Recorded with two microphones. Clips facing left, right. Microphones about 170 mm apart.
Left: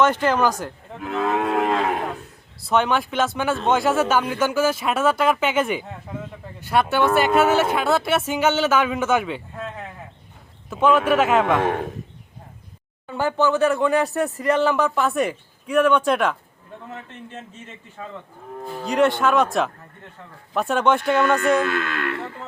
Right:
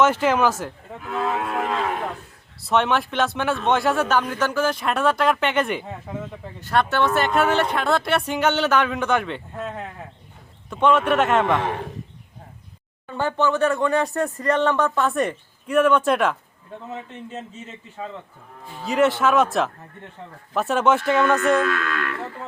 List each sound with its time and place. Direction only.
0.0 s speech: 5° right (ahead or behind)
1.4 s cattle: 55° left (ahead or behind)
2.6 s speech: centre (ahead or behind)
10.7 s speech: 5° left (ahead or behind)
13.1 s speech: 5° left (ahead or behind)
18.9 s speech: centre (ahead or behind)
21.6 s speech: 30° left (ahead or behind)